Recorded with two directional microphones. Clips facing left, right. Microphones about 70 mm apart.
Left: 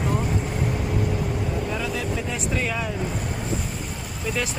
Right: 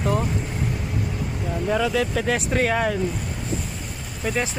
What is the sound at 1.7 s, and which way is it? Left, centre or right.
Speech, right.